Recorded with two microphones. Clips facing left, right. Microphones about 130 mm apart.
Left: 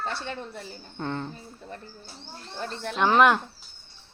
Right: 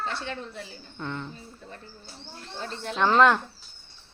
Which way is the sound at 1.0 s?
40° left (ahead or behind).